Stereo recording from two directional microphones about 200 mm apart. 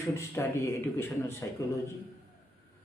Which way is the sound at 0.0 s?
15° left (ahead or behind).